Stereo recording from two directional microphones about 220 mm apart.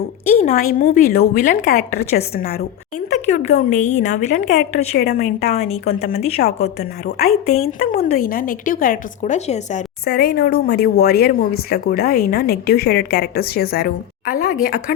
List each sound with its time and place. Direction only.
0.4 s speech: 40° left (ahead or behind)
3.1 s speech: 30° left (ahead or behind)
4.9 s speech: 45° left (ahead or behind)
5.4 s speech: 30° left (ahead or behind)
6.0 s speech: 40° left (ahead or behind)
7.3 s speech: 30° left (ahead or behind)
7.9 s speech: 40° left (ahead or behind)
10.1 s speech: 45° left (ahead or behind)